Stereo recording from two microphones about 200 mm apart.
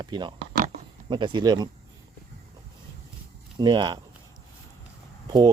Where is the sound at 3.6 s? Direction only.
20° right (ahead or behind).